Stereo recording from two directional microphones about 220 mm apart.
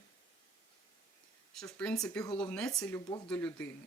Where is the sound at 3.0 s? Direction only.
20° left (ahead or behind).